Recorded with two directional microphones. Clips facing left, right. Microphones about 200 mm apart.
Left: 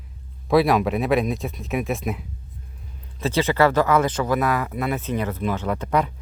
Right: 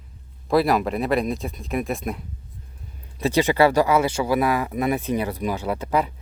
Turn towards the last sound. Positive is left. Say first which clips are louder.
# even
turn(degrees=-5)  # may be behind; listen again after turning